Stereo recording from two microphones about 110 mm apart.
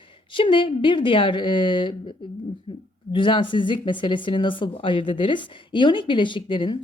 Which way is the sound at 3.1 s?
50° left (ahead or behind).